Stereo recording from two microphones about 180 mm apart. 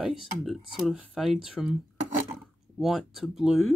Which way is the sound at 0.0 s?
Centre (ahead or behind).